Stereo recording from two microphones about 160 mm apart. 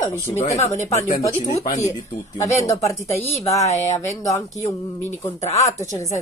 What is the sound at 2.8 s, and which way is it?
Speech, 20° left (ahead or behind).